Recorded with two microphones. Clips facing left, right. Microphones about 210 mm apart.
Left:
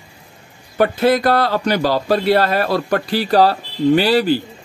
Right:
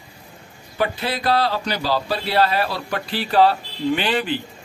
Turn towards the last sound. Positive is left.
turn(degrees=40)  # may be behind; listen again after turning